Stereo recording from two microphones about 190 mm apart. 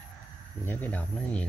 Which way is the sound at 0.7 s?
10° left (ahead or behind).